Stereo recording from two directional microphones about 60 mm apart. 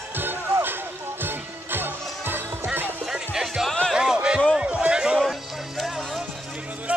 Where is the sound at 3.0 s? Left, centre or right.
Centre.